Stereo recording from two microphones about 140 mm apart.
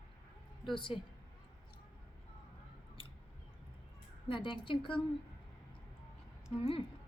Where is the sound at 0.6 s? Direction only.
35° left (ahead or behind).